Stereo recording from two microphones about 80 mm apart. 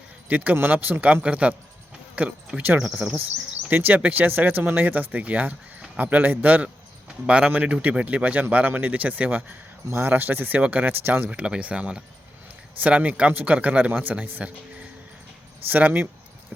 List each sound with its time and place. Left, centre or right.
0.3 s speech: right; by 3.2 s centre
3.7 s speech: right
11.3 s speech: centre